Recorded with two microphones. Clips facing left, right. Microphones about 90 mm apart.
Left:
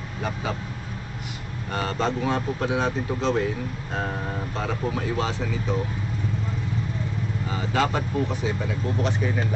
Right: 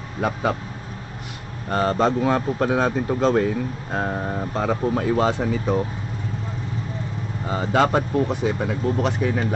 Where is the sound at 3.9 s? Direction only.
30° right (ahead or behind); by 5.7 s 50° right (ahead or behind).